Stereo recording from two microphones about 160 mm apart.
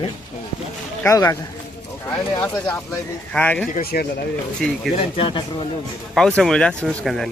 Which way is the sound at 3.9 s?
60° left (ahead or behind).